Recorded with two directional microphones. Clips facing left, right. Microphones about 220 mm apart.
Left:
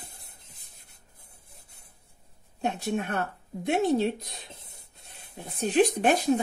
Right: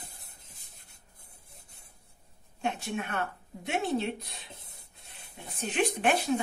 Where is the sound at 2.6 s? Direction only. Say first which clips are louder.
Left 4 dB; 40° left (ahead or behind).